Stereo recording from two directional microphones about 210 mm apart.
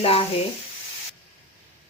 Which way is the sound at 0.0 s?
25° left (ahead or behind).